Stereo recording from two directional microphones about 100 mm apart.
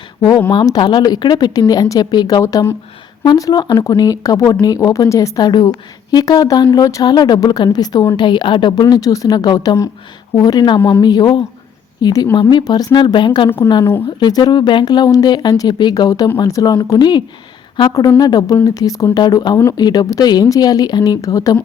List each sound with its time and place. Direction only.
0.2 s a woman's voice: 50° left (ahead or behind)
2.4 s speech: 35° left (ahead or behind); by 3.8 s 50° left (ahead or behind)
3.8 s speech: 35° left (ahead or behind)
5.4 s speech: 50° left (ahead or behind)
8.7 s speech: 40° left (ahead or behind)